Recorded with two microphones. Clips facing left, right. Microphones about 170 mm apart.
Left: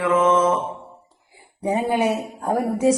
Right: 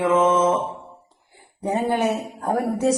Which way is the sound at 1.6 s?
10° left (ahead or behind).